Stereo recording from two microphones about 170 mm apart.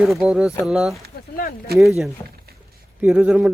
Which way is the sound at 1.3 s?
60° left (ahead or behind).